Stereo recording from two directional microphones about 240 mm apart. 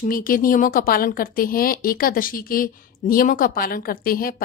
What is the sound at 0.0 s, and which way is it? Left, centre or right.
A woman's voice, left.